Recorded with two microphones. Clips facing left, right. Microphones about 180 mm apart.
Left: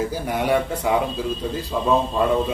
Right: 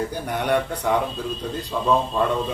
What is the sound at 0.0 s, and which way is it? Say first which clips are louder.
A man's voice: left 2 dB; 5° left (ahead or behind).